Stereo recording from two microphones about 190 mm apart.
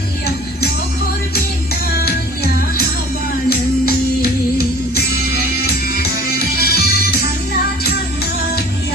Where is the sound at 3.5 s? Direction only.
55° left (ahead or behind).